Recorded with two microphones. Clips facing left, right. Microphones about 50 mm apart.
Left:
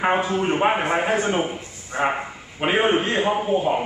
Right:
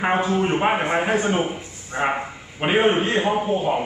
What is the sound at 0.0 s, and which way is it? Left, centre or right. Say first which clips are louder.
A man's voice: even; centre.